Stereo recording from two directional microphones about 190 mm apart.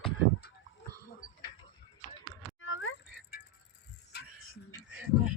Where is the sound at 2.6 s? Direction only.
90° left.